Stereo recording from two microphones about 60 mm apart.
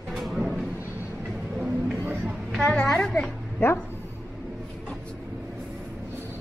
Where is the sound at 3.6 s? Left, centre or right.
Left.